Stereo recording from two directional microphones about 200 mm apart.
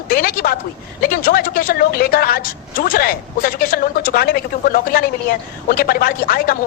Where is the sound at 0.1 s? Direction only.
45° left (ahead or behind).